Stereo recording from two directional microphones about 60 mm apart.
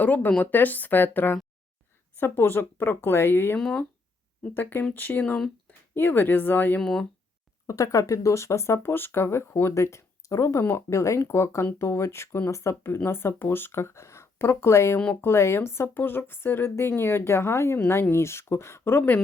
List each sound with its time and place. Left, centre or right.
0.0 s speech: left
3.6 s speech: centre
4.5 s speech: left
7.7 s speech: left
13.1 s speech: left
14.9 s speech: left
15.2 s speech: left